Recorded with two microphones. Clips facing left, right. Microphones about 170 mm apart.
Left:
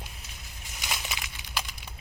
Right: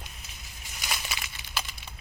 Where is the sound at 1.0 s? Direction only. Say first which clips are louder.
Even; 15° left (ahead or behind).